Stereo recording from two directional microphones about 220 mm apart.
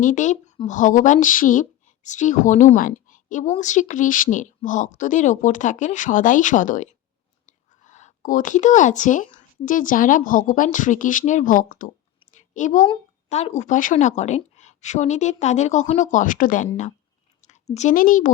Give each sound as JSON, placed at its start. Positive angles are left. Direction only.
{"t": 0.0, "sound": "a woman's voice", "side_deg": 35}
{"t": 12.4, "sound": "a sound", "side_deg": 35}
{"t": 13.2, "sound": "a woman's voice", "side_deg": 30}